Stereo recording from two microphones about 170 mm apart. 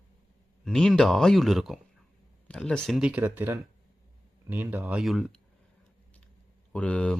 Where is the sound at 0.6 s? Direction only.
5° left (ahead or behind).